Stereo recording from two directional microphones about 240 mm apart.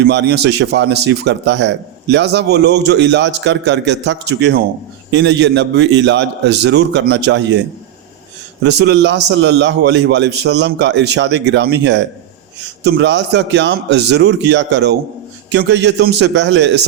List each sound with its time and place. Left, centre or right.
0.1 s a man's voice: right
8.6 s a man's voice: right